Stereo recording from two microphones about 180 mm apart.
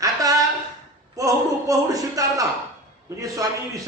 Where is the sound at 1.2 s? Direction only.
20° right (ahead or behind).